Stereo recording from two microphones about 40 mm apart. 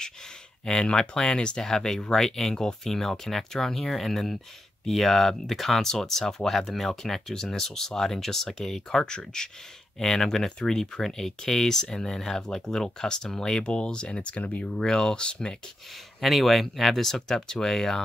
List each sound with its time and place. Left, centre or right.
0.7 s speech: centre
13.7 s speech: left
14.6 s speech: centre
16.2 s speech: centre